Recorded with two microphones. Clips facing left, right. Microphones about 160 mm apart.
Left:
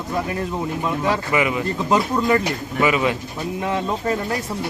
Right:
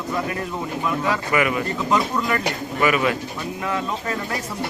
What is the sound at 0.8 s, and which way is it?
Speech, 25° left (ahead or behind).